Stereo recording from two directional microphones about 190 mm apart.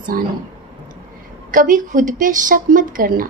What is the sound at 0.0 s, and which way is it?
Speech, 50° right (ahead or behind).